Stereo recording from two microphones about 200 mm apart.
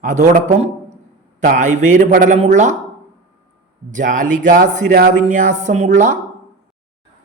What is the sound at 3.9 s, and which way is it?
A man's voice, 40° right (ahead or behind).